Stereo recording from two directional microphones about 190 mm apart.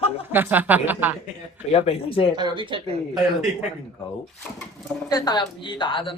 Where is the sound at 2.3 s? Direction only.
25° right (ahead or behind).